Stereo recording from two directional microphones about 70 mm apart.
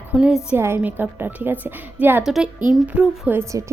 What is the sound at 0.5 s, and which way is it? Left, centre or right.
A woman's voice, right.